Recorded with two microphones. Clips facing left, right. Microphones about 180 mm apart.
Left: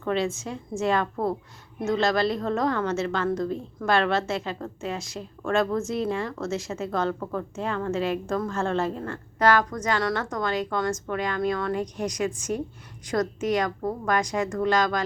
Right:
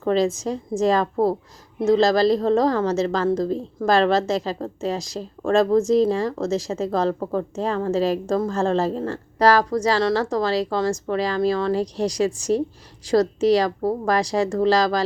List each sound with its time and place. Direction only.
0.0 s a woman's voice: 35° right (ahead or behind)